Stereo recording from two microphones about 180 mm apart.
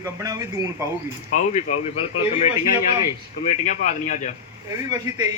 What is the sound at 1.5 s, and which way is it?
A man's voice, 40° left (ahead or behind).